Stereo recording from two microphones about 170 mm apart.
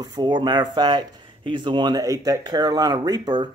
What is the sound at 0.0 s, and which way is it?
Speech, 25° right (ahead or behind).